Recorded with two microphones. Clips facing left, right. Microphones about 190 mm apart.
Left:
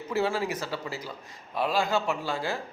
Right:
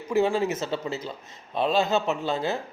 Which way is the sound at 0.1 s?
20° right (ahead or behind).